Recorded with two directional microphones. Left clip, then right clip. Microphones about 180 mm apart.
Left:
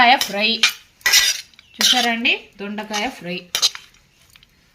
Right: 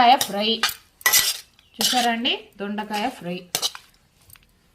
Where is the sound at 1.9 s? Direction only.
5° left (ahead or behind).